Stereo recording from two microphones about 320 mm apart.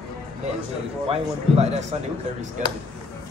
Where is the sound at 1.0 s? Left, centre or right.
Centre.